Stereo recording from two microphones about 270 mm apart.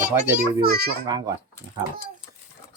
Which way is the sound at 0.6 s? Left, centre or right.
Right.